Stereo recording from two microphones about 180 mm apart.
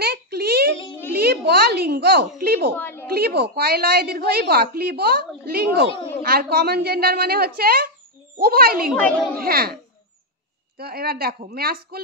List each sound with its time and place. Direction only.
0.0 s a sound: 60° right (ahead or behind)
2.8 s a sound: 10° left (ahead or behind)
3.1 s a woman's voice: 60° right (ahead or behind)
8.9 s a child's voice: 10° left (ahead or behind)
9.4 s a woman's voice: 60° right (ahead or behind)
10.8 s a woman's voice: 60° right (ahead or behind)